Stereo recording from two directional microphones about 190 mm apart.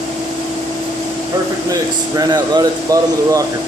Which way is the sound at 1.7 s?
20° right (ahead or behind).